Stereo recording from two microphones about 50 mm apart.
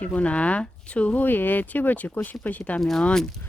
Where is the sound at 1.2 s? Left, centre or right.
Left.